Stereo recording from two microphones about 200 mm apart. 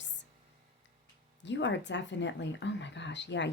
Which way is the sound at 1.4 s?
65° left (ahead or behind).